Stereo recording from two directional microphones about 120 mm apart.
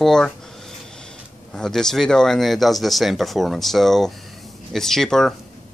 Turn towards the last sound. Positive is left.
turn(degrees=5)  # may be behind; listen again after turning